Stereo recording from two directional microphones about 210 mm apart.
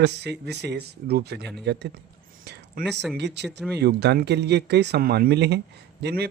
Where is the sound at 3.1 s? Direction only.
55° right (ahead or behind).